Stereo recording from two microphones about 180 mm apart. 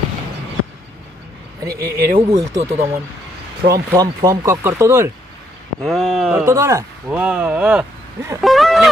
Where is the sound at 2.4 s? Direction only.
20° right (ahead or behind).